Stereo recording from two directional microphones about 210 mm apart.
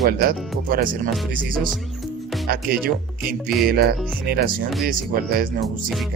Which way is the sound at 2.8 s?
45° right (ahead or behind).